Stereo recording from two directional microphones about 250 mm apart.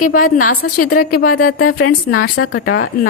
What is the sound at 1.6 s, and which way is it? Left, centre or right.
Speech, left.